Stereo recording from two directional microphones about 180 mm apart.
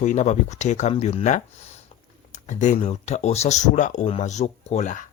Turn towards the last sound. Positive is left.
turn(degrees=45)  # may be behind; listen again after turning